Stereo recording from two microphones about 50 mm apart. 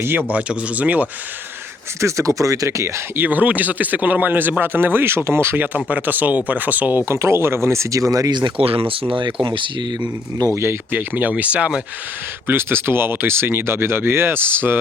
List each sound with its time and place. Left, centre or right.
0.0 s speech: right
0.3 s a man's voice: right
2.0 s speech: right
3.2 s a man's voice: right
5.5 s a man's voice: right
7.0 s speech: right
10.5 s speech: right
10.9 s speech: right
12.5 s speech: right